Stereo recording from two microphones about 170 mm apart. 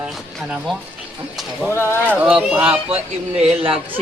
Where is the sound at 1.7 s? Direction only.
15° left (ahead or behind).